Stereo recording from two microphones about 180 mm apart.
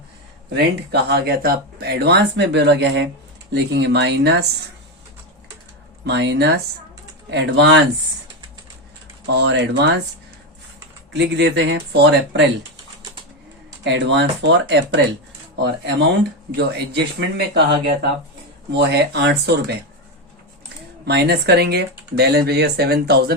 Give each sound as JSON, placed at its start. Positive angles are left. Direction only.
{"t": 0.5, "sound": "speech", "side_deg": -65}
{"t": 3.5, "sound": "speech", "side_deg": -70}
{"t": 6.1, "sound": "speech", "side_deg": -70}
{"t": 9.2, "sound": "speech", "side_deg": -75}
{"t": 11.1, "sound": "speech", "side_deg": -75}
{"t": 13.8, "sound": "speech", "side_deg": -80}
{"t": 18.8, "sound": "speech", "side_deg": -70}
{"t": 21.0, "sound": "speech", "side_deg": -65}